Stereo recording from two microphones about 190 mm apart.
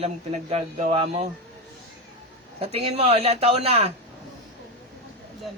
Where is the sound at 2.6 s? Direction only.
30° right (ahead or behind).